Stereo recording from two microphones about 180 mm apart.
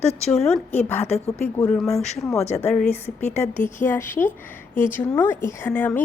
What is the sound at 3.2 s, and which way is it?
Speech, 40° left (ahead or behind).